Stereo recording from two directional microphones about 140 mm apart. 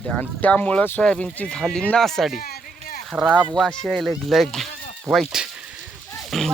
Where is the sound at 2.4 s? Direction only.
90° left.